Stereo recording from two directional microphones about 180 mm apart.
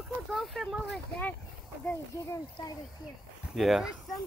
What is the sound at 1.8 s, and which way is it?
Speech, 15° left (ahead or behind).